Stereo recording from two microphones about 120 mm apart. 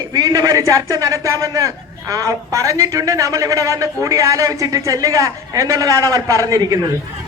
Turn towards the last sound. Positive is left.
turn(degrees=-30)  # may be behind; listen again after turning